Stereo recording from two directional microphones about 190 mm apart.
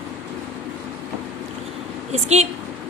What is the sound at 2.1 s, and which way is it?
Speech, 35° right (ahead or behind).